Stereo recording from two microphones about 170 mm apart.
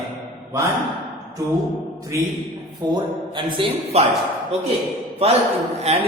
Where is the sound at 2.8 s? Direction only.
25° right (ahead or behind).